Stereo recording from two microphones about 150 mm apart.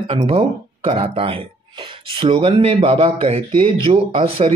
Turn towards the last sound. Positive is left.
turn(degrees=-40)  # may be behind; listen again after turning